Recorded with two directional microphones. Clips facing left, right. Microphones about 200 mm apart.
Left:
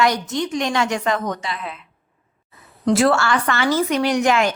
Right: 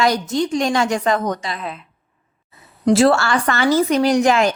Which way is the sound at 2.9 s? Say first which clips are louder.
Right 2 dB; 35° right (ahead or behind).